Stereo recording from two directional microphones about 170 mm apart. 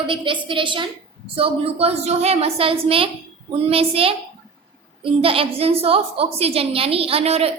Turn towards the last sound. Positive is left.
turn(degrees=-35)  # may be behind; listen again after turning